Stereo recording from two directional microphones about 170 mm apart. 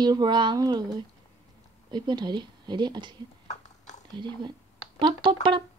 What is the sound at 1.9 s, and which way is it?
Speech, 25° right (ahead or behind).